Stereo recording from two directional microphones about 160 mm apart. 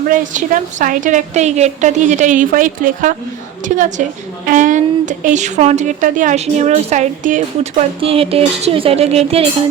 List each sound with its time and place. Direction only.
0.1 s speech: 55° right (ahead or behind)
8.0 s speech: 35° right (ahead or behind)